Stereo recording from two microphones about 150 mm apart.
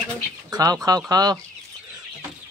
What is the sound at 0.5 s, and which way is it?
Speech, 25° right (ahead or behind).